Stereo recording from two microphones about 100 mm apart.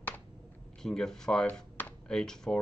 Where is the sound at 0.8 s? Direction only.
5° left (ahead or behind).